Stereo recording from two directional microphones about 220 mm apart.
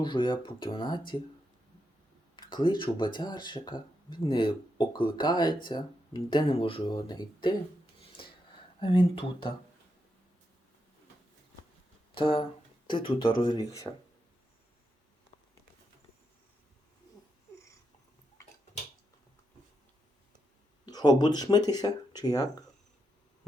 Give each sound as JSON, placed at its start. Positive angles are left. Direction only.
{"t": 0.0, "sound": "speech", "side_deg": 20}
{"t": 2.3, "sound": "speech", "side_deg": 20}
{"t": 8.0, "sound": "a sound", "side_deg": 25}
{"t": 8.8, "sound": "speech", "side_deg": 25}
{"t": 12.1, "sound": "speech", "side_deg": 25}
{"t": 20.8, "sound": "speech", "side_deg": 20}